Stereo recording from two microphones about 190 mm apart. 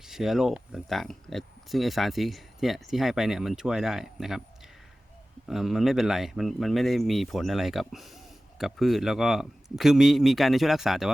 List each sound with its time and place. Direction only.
0.1 s speech: centre (ahead or behind)
5.5 s speech: centre (ahead or behind)